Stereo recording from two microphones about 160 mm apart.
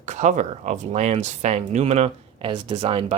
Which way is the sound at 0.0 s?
45° right (ahead or behind).